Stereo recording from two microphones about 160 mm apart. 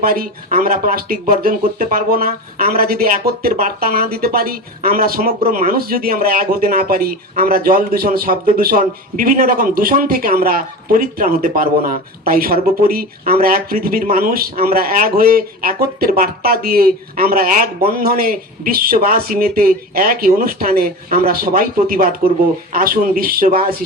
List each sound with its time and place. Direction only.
0.0 s speech: 65° right (ahead or behind)